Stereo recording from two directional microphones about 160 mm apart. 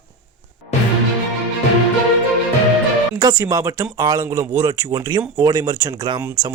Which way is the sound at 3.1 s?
20° right (ahead or behind).